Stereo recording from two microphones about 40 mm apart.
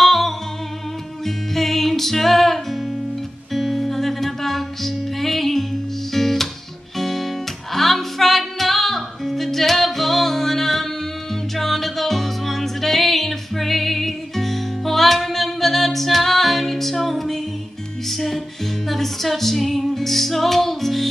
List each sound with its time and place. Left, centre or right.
0.0 s music: centre